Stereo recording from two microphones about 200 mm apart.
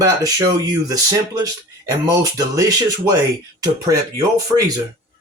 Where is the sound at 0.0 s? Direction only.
20° right (ahead or behind).